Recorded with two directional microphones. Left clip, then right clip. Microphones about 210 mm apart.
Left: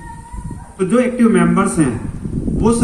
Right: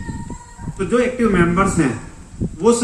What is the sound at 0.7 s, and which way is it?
A man's voice, 55° left (ahead or behind).